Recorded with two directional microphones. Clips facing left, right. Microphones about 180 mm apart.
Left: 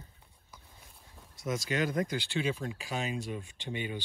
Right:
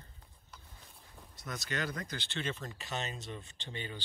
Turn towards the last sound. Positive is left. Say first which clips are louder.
# left 6 dB
turn(degrees=15)  # may be behind; listen again after turning